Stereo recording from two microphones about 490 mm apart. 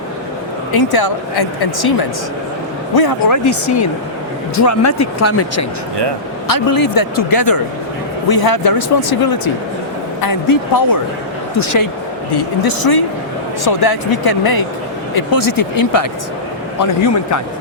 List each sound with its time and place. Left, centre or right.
0.7 s speech: left
6.5 s speech: left
12.3 s speech: left